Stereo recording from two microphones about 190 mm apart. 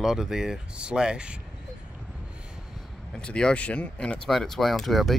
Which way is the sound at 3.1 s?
5° left (ahead or behind).